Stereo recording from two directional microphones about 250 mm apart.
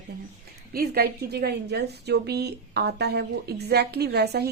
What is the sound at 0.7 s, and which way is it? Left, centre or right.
A woman's voice, right.